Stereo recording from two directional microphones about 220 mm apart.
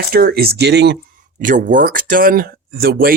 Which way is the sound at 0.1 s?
45° right (ahead or behind).